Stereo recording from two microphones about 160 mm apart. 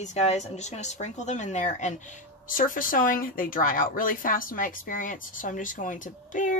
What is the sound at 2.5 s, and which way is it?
Speech, 60° left (ahead or behind).